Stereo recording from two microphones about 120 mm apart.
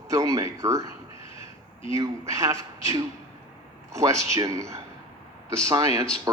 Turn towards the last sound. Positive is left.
turn(degrees=-30)  # may be behind; listen again after turning